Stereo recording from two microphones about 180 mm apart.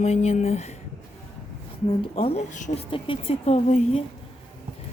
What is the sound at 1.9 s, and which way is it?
Speech, 30° left (ahead or behind).